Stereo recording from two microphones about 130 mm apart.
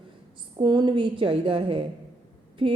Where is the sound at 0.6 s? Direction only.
35° right (ahead or behind).